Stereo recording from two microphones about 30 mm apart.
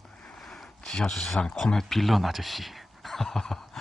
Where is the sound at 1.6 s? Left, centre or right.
Centre.